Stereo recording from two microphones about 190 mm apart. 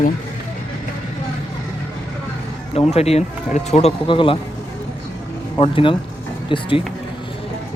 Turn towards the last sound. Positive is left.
turn(degrees=25)  # may be behind; listen again after turning